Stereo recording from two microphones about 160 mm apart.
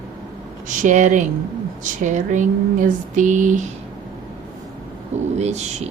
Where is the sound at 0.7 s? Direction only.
50° right (ahead or behind).